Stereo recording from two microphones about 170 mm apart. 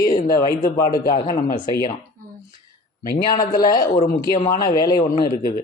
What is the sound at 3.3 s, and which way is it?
A man's voice, 25° left (ahead or behind).